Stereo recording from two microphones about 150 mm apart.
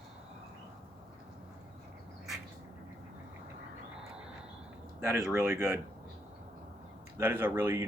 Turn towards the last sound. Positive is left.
turn(degrees=-15)  # may be behind; listen again after turning